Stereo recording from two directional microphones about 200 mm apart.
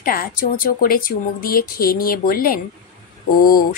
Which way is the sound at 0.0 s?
45° left (ahead or behind).